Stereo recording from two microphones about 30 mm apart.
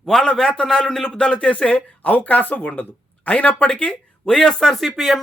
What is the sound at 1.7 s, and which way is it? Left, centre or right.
Speech, left.